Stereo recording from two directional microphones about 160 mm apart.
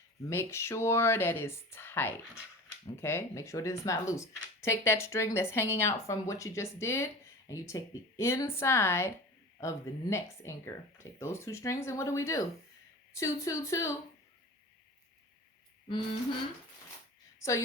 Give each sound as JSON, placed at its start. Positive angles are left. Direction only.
{"t": 0.3, "sound": "speech", "side_deg": 15}